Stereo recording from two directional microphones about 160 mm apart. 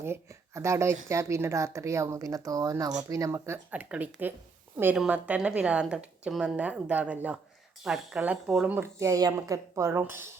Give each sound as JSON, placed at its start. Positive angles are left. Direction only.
{"t": 0.0, "sound": "speech", "side_deg": -15}